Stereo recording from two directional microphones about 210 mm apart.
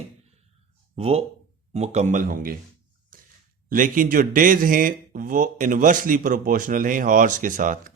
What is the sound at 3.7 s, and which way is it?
A man's voice, 40° right (ahead or behind).